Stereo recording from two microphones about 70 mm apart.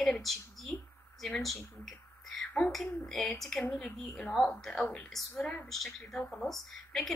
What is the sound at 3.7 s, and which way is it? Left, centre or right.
Speech, centre.